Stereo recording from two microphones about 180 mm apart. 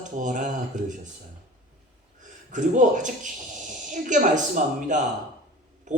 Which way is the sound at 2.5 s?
45° right (ahead or behind).